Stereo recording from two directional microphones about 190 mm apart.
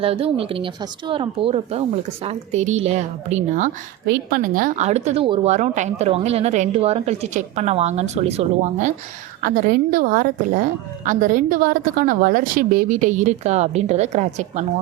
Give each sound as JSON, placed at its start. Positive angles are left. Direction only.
{"t": 0.0, "sound": "a woman's voice", "side_deg": -30}
{"t": 4.0, "sound": "a woman's voice", "side_deg": -55}
{"t": 9.4, "sound": "a woman's voice", "side_deg": -50}